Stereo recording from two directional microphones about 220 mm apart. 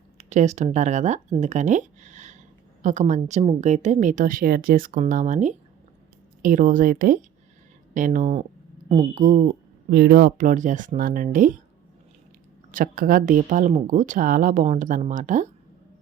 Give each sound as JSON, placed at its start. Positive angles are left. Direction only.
{"t": 0.2, "sound": "a woman's voice", "side_deg": -30}
{"t": 9.9, "sound": "a woman's voice", "side_deg": -45}
{"t": 12.7, "sound": "a woman's voice", "side_deg": -40}